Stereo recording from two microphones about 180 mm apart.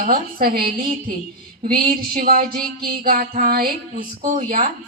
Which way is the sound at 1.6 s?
55° right (ahead or behind).